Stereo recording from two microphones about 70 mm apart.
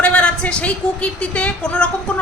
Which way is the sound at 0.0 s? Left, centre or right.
Centre.